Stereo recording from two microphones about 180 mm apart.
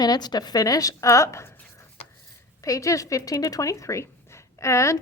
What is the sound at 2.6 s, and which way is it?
A woman's voice, 20° left (ahead or behind).